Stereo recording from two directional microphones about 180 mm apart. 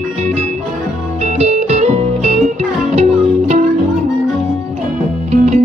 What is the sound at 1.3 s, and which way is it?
Music, 40° right (ahead or behind).